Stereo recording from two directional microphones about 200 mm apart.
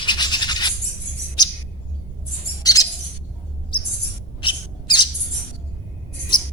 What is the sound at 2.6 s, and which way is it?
Bird, 20° left (ahead or behind).